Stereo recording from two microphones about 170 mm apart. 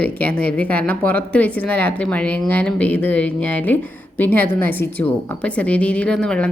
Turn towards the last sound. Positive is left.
turn(degrees=5)  # may be behind; listen again after turning